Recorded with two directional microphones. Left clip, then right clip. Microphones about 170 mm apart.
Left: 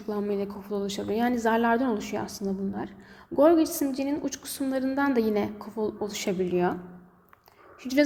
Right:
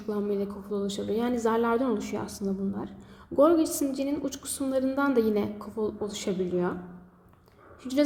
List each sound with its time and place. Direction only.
0.1 s a woman's voice: 10° left (ahead or behind)